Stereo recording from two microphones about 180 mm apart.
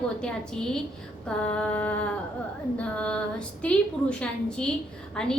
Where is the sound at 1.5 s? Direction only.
5° left (ahead or behind).